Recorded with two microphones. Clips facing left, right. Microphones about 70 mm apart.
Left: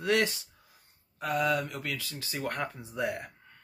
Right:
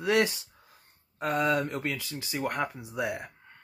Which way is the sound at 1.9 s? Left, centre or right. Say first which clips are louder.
Right 2 dB; right.